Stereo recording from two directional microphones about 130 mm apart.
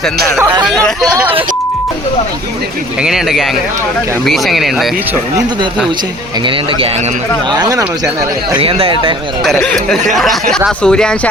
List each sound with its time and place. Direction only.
0.6 s speech: 5° left (ahead or behind)
3.0 s speech: 5° right (ahead or behind)
6.4 s speech: 45° right (ahead or behind)
7.5 s speech: 30° right (ahead or behind)
8.5 s a man's voice: 45° right (ahead or behind)
9.4 s speech: 5° left (ahead or behind)